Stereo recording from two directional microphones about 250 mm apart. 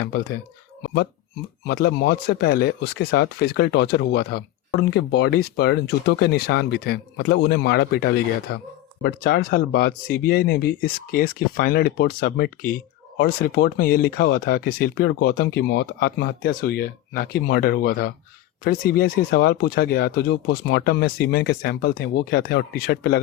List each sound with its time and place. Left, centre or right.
0.0 s speech: left
0.8 s a sound: left
1.6 s speech: left